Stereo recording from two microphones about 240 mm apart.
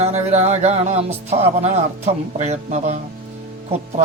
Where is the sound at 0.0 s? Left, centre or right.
Right.